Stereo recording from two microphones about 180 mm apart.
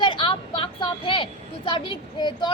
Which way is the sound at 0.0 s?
30° left (ahead or behind).